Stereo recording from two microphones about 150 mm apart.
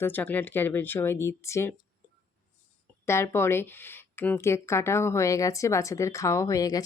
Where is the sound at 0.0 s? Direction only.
10° left (ahead or behind).